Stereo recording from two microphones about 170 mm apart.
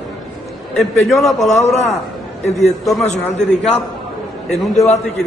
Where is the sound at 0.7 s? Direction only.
Centre (ahead or behind).